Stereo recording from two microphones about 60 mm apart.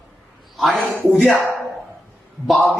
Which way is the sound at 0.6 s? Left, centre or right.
Centre.